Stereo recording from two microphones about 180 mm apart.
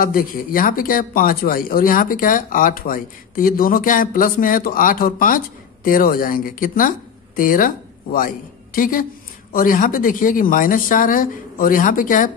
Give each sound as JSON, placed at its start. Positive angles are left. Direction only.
{"t": 0.0, "sound": "a woman's voice", "side_deg": 50}